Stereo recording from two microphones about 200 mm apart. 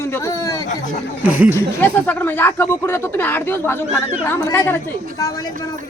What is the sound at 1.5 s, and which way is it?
A woman's voice, 10° left (ahead or behind).